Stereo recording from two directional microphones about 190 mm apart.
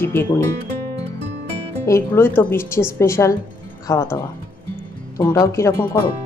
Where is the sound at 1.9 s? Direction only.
15° left (ahead or behind).